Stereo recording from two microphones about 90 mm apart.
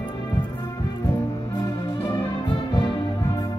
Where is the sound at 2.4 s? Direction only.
60° left (ahead or behind).